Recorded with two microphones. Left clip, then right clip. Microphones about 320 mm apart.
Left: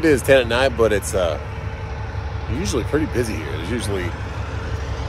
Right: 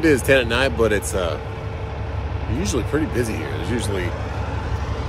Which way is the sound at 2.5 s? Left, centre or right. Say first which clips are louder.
Left 1 dB; centre.